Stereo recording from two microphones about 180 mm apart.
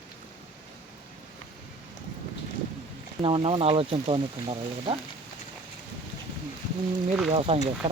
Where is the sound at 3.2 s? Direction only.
30° right (ahead or behind).